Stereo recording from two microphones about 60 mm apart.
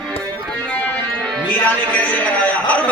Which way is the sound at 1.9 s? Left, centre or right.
Left.